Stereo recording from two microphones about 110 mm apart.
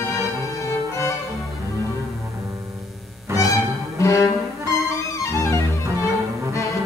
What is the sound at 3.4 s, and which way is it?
Music, 30° left (ahead or behind).